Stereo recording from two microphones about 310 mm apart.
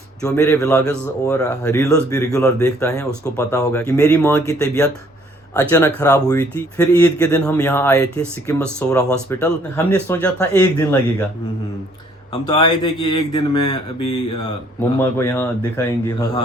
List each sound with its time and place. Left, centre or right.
0.2 s a man's voice: centre
12.3 s a man's voice: centre
14.9 s a man's voice: centre